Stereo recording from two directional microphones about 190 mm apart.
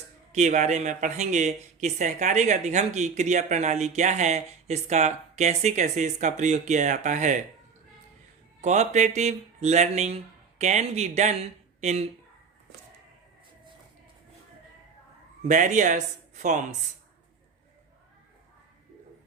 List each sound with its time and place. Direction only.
0.3 s speech: 40° right (ahead or behind)
8.6 s speech: 40° right (ahead or behind)
15.4 s speech: 40° right (ahead or behind)